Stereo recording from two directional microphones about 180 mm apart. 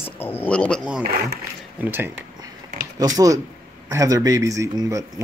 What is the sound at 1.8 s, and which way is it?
Speech, 10° right (ahead or behind).